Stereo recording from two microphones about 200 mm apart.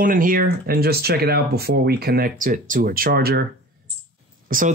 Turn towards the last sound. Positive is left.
turn(degrees=-45)  # may be behind; listen again after turning